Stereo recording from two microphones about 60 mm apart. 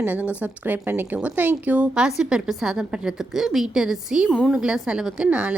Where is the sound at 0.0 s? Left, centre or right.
Right.